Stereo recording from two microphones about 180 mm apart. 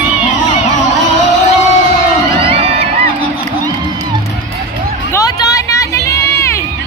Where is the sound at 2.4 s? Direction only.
30° right (ahead or behind).